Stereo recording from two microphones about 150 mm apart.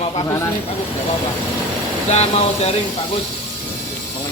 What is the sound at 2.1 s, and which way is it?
Speech, 45° left (ahead or behind).